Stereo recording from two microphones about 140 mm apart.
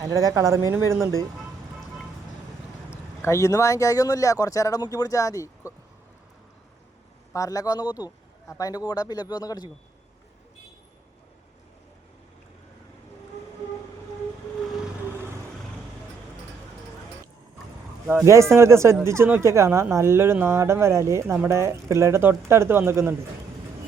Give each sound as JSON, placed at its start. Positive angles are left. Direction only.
{"t": 0.0, "sound": "speech", "side_deg": -25}
{"t": 2.9, "sound": "speech", "side_deg": 20}
{"t": 7.3, "sound": "speech", "side_deg": 25}
{"t": 18.3, "sound": "speech", "side_deg": -20}